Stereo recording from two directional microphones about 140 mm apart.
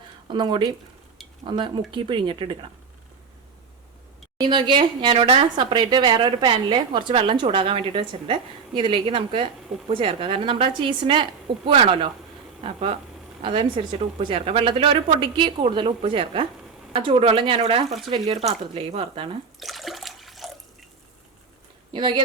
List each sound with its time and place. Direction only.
0.3 s speech: 35° right (ahead or behind)
4.4 s speech: 35° right (ahead or behind)
19.5 s water: centre (ahead or behind)
21.9 s speech: 35° right (ahead or behind)